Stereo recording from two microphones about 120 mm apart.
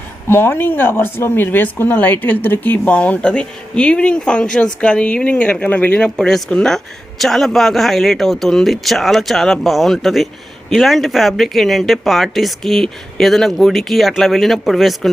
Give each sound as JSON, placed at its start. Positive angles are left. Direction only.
{"t": 0.3, "sound": "speech", "side_deg": 20}